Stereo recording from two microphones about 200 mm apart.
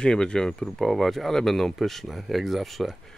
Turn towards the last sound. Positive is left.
turn(degrees=0)  # may be behind; listen again after turning